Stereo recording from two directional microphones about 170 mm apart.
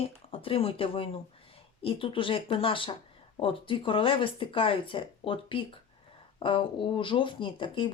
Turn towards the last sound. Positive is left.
turn(degrees=30)  # may be behind; listen again after turning